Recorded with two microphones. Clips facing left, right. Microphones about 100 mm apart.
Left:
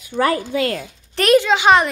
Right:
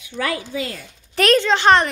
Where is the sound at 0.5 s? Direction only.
65° left (ahead or behind).